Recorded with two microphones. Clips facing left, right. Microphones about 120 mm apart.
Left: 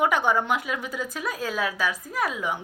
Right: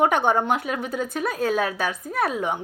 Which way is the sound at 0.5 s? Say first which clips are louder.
Right 3 dB; 40° right (ahead or behind).